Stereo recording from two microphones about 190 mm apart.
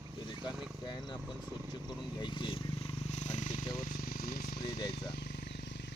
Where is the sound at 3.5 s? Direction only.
25° left (ahead or behind).